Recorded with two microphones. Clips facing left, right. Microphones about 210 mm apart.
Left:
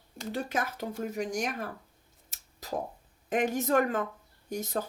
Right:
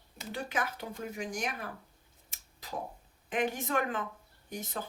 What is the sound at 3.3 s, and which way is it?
Speech, 45° left (ahead or behind).